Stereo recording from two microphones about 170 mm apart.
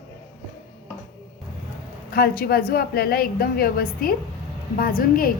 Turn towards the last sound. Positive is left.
turn(degrees=60)  # may be behind; listen again after turning